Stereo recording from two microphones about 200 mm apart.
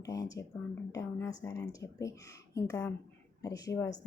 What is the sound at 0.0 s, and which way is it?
Speech, 15° left (ahead or behind).